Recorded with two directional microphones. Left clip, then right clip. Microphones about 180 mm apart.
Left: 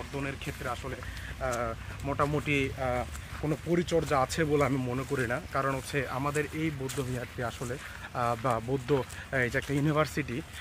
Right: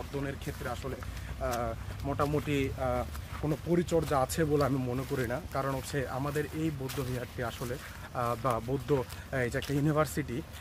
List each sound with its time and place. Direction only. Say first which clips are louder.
0.2 s speech: left 2 dB; 25° left (ahead or behind)
1.6 s speech: left 2 dB; 50° left (ahead or behind)
8.1 s speech: left 2 dB; 45° left (ahead or behind)